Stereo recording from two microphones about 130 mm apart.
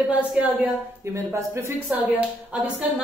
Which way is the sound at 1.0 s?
20° right (ahead or behind).